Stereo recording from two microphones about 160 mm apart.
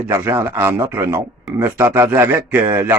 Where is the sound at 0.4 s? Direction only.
10° right (ahead or behind).